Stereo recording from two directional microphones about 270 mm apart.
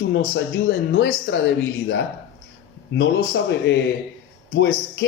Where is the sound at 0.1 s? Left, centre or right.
Left.